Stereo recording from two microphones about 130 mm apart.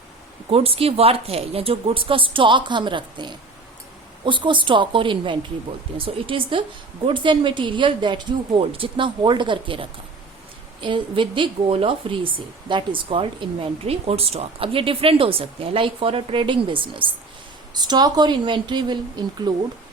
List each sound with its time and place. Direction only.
0.5 s a woman's voice: 45° right (ahead or behind)